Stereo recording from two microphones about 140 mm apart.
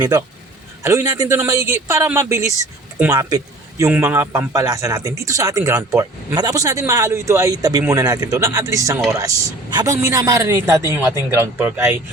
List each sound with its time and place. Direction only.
0.8 s a man's voice: 20° right (ahead or behind)